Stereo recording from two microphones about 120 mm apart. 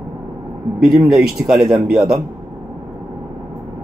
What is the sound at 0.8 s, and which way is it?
Speech, 5° right (ahead or behind).